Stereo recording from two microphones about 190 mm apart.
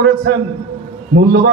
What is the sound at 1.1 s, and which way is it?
Speech, 55° right (ahead or behind).